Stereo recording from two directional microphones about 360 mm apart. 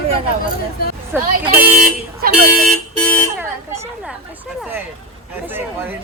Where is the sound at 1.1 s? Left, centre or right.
Centre.